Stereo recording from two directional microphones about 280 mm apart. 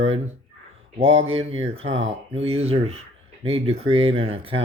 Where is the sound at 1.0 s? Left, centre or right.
Right.